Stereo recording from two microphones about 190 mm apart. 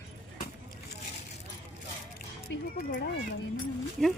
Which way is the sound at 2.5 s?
70° left (ahead or behind).